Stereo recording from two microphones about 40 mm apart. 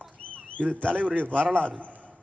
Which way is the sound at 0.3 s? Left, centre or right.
Left.